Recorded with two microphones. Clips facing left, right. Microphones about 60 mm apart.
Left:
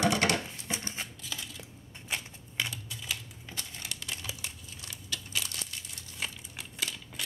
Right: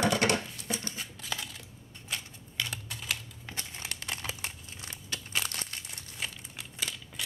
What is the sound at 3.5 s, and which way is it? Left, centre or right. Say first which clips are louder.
Crumpling: right 1 dB; right.